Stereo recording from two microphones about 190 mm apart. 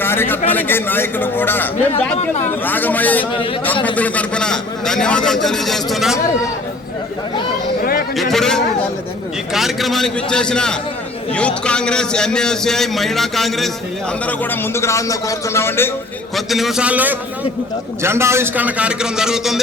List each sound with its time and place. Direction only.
0.0 s a man's voice: 10° left (ahead or behind)
2.1 s speech: 35° left (ahead or behind)
2.6 s a man's voice: 10° left (ahead or behind)
7.8 s a sound: 50° left (ahead or behind)
8.1 s a man's voice: centre (ahead or behind)
16.3 s a man's voice: centre (ahead or behind)